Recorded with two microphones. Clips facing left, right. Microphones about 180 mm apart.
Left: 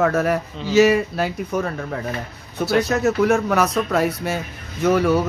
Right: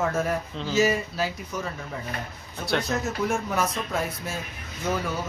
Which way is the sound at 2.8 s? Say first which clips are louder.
Left 11 dB; 70° left (ahead or behind).